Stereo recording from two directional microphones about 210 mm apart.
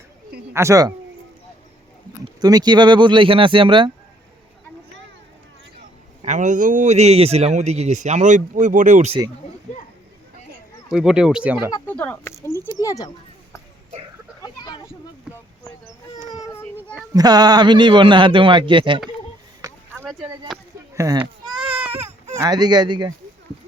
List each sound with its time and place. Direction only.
0.5 s speech: 15° right (ahead or behind)
2.2 s a man's voice: 20° right (ahead or behind)
6.2 s a man's voice: 35° right (ahead or behind)
10.9 s speech: 5° right (ahead or behind)
11.9 s speech: 5° left (ahead or behind)
14.4 s children playing: 20° left (ahead or behind)
17.2 s a man's voice: 20° right (ahead or behind)
19.6 s a sound: 10° right (ahead or behind)
20.9 s baby cry: 15° right (ahead or behind)
21.8 s baby cry: 10° right (ahead or behind)
22.4 s a man's voice: 20° right (ahead or behind)